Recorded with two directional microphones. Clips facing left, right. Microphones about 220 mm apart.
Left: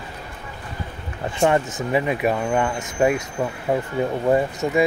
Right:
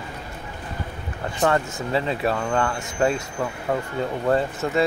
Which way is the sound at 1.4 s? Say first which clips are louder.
Left 3 dB; 20° left (ahead or behind).